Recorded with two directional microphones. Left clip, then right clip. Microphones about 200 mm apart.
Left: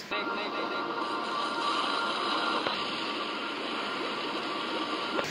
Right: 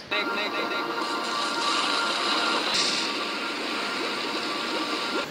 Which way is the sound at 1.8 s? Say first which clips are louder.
Right 5 dB; 90° right.